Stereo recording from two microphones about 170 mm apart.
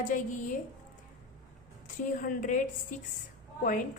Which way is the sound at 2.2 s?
50° left (ahead or behind).